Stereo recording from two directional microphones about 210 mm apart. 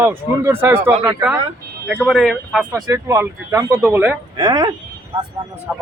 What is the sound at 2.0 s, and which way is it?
Speech, centre (ahead or behind).